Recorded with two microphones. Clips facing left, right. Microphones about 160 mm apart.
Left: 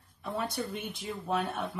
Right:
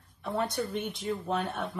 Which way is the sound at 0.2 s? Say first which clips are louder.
Right 3 dB; centre (ahead or behind).